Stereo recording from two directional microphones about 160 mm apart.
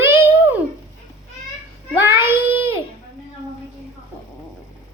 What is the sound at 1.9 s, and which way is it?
Speech, 10° right (ahead or behind).